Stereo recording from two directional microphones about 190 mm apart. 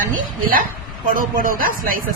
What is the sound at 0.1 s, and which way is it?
Speech, 45° right (ahead or behind).